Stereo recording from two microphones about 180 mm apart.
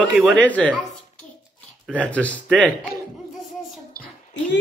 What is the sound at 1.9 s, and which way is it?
Speech, 5° left (ahead or behind).